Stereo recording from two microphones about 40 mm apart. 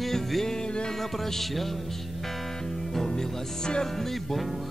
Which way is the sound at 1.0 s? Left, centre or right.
Centre.